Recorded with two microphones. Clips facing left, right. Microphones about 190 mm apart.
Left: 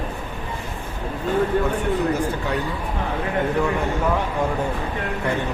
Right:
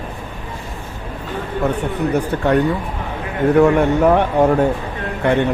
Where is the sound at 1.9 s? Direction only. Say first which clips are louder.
Right 3 dB; 60° right (ahead or behind).